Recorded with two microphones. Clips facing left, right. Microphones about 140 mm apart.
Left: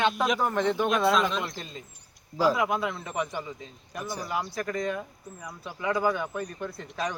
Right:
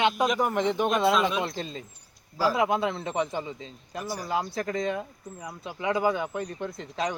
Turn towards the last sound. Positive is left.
turn(degrees=-20)  # may be behind; listen again after turning